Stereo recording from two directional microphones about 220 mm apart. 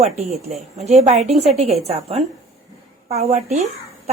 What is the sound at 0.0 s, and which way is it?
A woman's voice, 30° right (ahead or behind).